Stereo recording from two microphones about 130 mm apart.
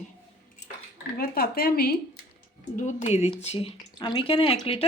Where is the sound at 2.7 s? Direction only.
65° left (ahead or behind); by 4.9 s 50° left (ahead or behind).